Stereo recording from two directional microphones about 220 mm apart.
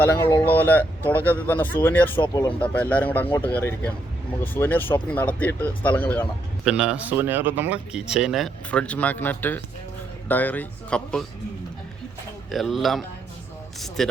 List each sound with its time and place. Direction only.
0.3 s speech: 10° left (ahead or behind)
2.6 s speech: 5° left (ahead or behind)
6.7 s speech: 5° right (ahead or behind)
12.5 s speech: centre (ahead or behind)